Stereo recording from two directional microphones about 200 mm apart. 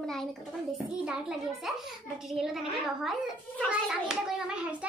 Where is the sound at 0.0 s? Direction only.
Centre (ahead or behind).